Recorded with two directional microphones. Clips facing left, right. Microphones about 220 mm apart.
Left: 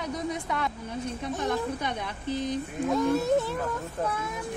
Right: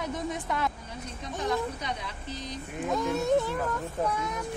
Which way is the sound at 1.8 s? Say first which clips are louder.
Left 3 dB; 55° left (ahead or behind).